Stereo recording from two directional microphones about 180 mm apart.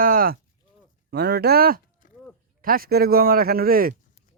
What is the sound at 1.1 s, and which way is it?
A man's voice, 65° right (ahead or behind).